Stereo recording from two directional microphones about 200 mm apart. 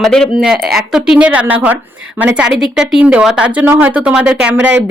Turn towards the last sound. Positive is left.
turn(degrees=-60)  # may be behind; listen again after turning